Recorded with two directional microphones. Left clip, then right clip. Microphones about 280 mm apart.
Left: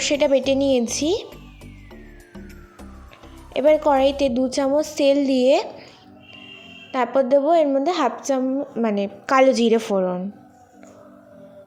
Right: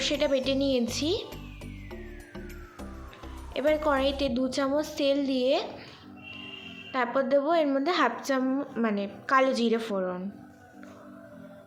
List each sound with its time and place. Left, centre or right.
0.0 s a woman's voice: left
3.5 s a woman's voice: centre
6.9 s a woman's voice: left